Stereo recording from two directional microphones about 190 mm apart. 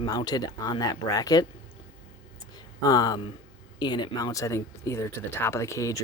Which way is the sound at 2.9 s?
20° left (ahead or behind).